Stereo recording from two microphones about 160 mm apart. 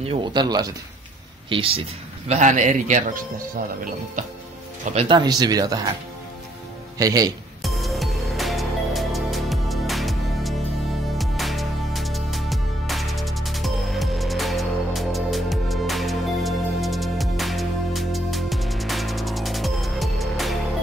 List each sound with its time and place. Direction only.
0.0 s speech: 35° right (ahead or behind)
2.2 s a man's voice: 45° right (ahead or behind)
5.0 s speech: 25° right (ahead or behind)
7.0 s speech: 20° right (ahead or behind)
7.6 s music: centre (ahead or behind)